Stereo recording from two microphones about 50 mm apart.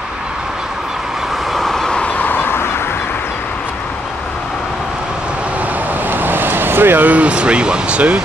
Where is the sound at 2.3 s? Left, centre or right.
Left.